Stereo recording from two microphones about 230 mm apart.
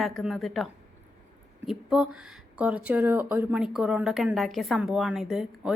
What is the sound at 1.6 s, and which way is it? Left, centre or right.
Speech, centre.